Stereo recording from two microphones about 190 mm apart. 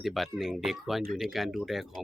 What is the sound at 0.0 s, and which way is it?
Speech, centre (ahead or behind).